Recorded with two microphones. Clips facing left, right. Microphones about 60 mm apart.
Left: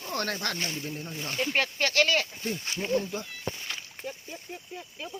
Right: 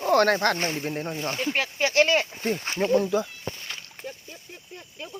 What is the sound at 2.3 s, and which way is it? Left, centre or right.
Speech, right.